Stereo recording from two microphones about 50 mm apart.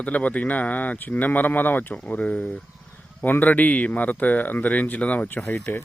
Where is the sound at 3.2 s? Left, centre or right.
Left.